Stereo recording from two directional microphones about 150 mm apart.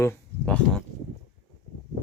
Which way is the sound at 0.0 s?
10° left (ahead or behind).